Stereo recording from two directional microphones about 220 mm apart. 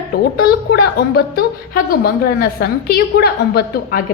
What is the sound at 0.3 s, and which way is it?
A woman's voice, 45° left (ahead or behind).